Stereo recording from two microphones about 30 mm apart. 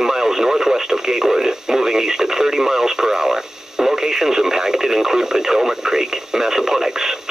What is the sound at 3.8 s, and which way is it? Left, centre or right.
Radio, centre.